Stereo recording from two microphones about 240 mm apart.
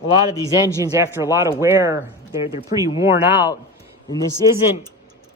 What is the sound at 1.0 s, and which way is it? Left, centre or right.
Speech, centre.